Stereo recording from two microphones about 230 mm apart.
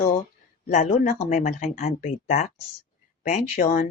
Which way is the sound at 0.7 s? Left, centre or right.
Left.